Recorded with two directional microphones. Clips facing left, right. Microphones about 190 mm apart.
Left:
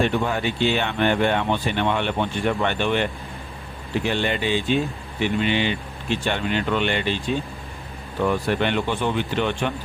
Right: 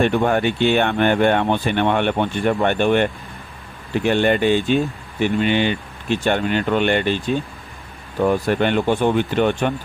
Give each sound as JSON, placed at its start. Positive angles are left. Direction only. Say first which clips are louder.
{"t": 0.0, "sound": "speech", "louder": "right 5 dB", "side_deg": -55}
{"t": 8.3, "sound": "speech", "louder": "right 4 dB", "side_deg": -45}